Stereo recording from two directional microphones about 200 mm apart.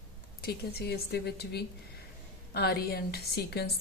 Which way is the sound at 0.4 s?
50° left (ahead or behind).